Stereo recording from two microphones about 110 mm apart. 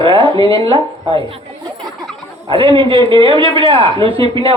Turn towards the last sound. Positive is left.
turn(degrees=-55)  # may be behind; listen again after turning